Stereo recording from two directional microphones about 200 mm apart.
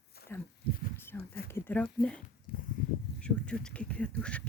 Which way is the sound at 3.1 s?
5° left (ahead or behind).